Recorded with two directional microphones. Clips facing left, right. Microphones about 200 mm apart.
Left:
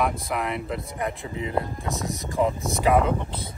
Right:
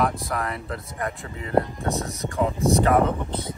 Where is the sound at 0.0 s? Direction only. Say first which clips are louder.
Right 1 dB; centre (ahead or behind).